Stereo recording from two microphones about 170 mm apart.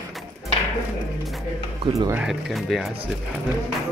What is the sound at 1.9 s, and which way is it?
Speech, 30° right (ahead or behind).